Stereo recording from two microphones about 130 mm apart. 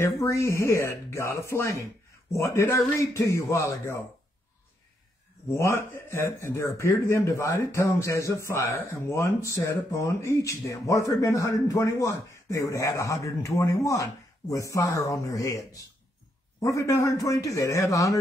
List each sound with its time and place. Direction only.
0.0 s speech: 20° left (ahead or behind)
5.6 s speech: 20° left (ahead or behind)